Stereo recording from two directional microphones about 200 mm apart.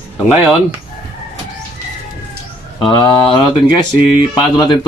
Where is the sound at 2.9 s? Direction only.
25° left (ahead or behind).